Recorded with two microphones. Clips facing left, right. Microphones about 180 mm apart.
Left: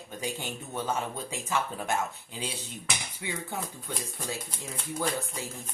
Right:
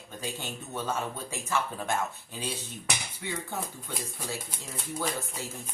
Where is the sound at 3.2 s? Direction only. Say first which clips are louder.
Even; 15° left (ahead or behind).